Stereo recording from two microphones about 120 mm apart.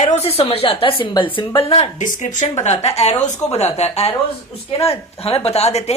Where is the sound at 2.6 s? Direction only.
60° left (ahead or behind).